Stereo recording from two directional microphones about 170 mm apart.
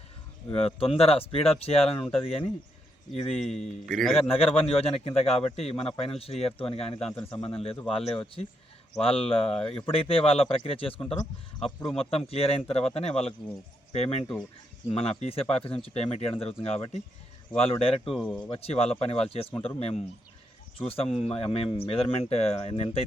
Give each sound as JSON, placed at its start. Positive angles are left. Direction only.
{"t": 0.5, "sound": "a man's voice", "side_deg": 35}
{"t": 3.4, "sound": "a man's voice", "side_deg": 0}
{"t": 4.3, "sound": "a man's voice", "side_deg": 35}
{"t": 9.6, "sound": "a man's voice", "side_deg": 5}
{"t": 9.8, "sound": "a man's voice", "side_deg": 35}
{"t": 11.6, "sound": "a man's voice", "side_deg": 5}
{"t": 11.9, "sound": "a man's voice", "side_deg": 35}